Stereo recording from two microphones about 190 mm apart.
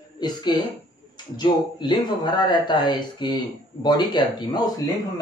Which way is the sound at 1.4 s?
25° left (ahead or behind).